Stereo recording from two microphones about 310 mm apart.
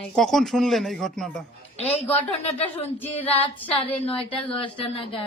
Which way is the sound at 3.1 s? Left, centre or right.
Centre.